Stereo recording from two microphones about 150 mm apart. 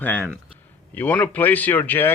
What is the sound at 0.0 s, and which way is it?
Speech, 10° left (ahead or behind).